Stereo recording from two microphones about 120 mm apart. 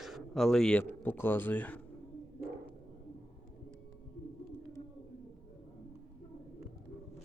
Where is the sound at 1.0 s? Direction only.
15° left (ahead or behind).